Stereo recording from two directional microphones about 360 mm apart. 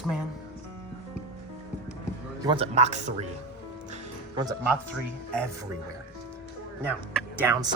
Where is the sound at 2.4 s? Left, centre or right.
Centre.